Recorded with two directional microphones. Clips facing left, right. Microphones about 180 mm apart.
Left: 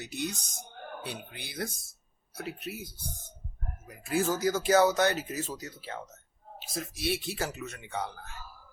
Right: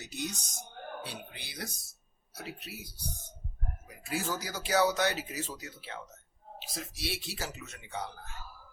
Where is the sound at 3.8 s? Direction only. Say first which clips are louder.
Left 7 dB; 50° left (ahead or behind).